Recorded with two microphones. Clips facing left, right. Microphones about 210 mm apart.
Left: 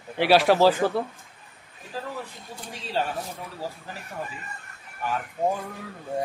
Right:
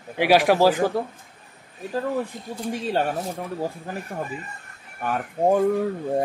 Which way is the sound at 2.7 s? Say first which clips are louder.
Right 5 dB; 55° right (ahead or behind).